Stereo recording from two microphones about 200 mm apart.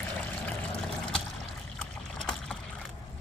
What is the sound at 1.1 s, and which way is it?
Boat, centre (ahead or behind).